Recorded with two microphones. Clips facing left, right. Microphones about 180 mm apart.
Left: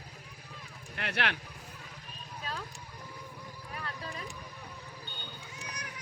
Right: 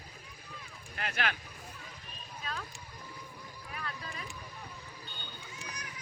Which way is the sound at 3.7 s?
35° left (ahead or behind).